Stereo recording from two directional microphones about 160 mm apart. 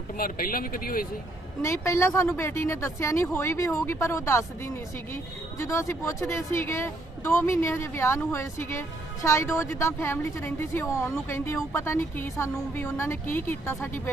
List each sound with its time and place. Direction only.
0.2 s a man's voice: 60° left (ahead or behind)
1.6 s speech: 15° left (ahead or behind)